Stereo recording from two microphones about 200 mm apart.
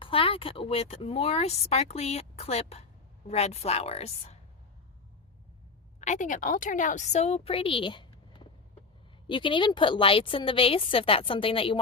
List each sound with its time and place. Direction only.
0.0 s speech: 25° left (ahead or behind)
6.0 s a woman's voice: 40° left (ahead or behind)